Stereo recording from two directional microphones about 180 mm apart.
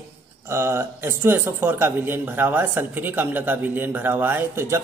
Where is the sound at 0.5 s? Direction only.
15° right (ahead or behind).